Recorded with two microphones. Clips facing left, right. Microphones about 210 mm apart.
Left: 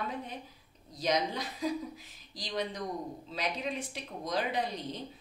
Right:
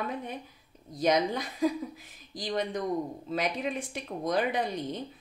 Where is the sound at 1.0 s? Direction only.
50° right (ahead or behind).